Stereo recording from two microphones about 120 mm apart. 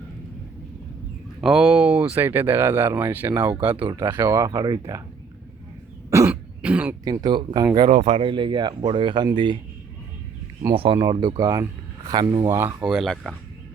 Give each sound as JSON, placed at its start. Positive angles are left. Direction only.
{"t": 1.4, "sound": "speech", "side_deg": -5}
{"t": 6.1, "sound": "throat clearing", "side_deg": -25}
{"t": 6.3, "sound": "cough", "side_deg": -10}
{"t": 7.0, "sound": "speech", "side_deg": -35}
{"t": 7.9, "sound": "speech", "side_deg": -65}
{"t": 10.8, "sound": "speech", "side_deg": -50}
{"t": 12.5, "sound": "speech", "side_deg": -20}
{"t": 12.8, "sound": "speech", "side_deg": 0}